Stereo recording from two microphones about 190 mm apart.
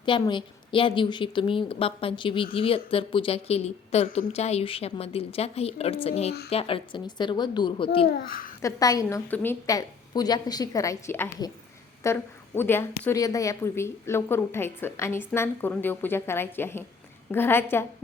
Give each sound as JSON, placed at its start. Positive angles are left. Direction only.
{"t": 0.0, "sound": "a woman's voice", "side_deg": 25}
{"t": 8.0, "sound": "a child's voice", "side_deg": 50}
{"t": 8.6, "sound": "a woman's voice", "side_deg": 20}